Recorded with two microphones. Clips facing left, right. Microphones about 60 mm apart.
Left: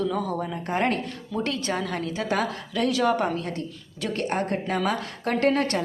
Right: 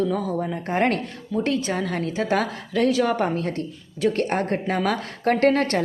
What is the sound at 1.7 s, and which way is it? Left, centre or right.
A woman's voice, right.